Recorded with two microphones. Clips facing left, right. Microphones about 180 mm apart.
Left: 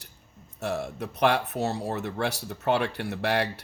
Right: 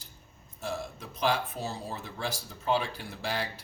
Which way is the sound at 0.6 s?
70° left (ahead or behind).